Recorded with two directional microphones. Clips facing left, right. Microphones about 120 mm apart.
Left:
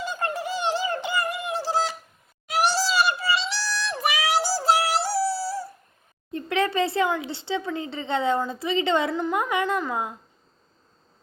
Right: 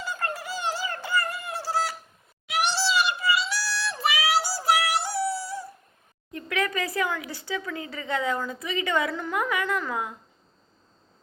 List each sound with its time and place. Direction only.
0.0 s a sound: 25° left (ahead or behind)
2.5 s synthetic singing: 40° left (ahead or behind)
6.3 s speech: 30° left (ahead or behind)